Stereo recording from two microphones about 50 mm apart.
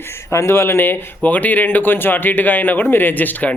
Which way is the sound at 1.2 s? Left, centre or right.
Left.